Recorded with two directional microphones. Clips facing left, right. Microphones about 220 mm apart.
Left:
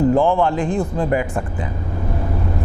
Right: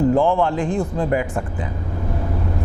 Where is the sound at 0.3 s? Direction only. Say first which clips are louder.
Left 1 dB; 15° left (ahead or behind).